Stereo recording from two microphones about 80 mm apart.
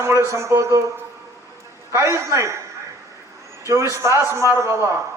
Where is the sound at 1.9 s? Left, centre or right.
Right.